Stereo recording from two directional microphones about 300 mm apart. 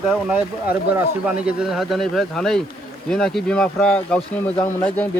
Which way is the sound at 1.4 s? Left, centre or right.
Centre.